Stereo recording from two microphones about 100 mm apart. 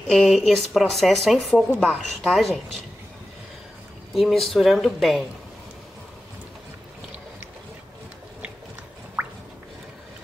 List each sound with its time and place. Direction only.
0.1 s speech: 5° left (ahead or behind)
4.1 s speech: centre (ahead or behind)
9.2 s drip: 20° right (ahead or behind)